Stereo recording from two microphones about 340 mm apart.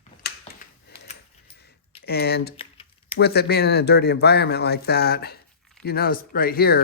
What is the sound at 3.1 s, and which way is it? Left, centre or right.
Speech, left.